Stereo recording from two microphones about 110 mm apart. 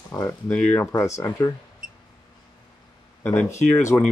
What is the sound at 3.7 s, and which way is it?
Speech, 25° left (ahead or behind).